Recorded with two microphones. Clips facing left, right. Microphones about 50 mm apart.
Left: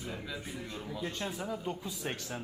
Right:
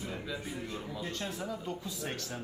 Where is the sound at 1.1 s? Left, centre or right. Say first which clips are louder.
Right 1 dB; centre.